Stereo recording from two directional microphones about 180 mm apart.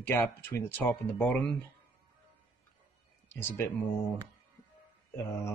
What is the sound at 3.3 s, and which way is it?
Speech, 10° left (ahead or behind).